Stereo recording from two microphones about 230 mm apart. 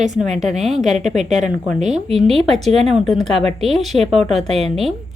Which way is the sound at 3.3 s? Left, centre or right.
Right.